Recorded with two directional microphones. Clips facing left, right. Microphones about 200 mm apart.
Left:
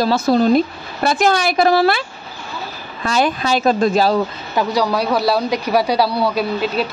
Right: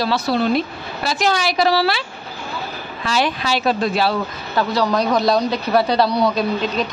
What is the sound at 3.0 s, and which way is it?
A woman's voice, 45° left (ahead or behind).